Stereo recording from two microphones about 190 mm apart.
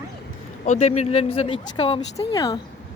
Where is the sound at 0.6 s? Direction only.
35° left (ahead or behind).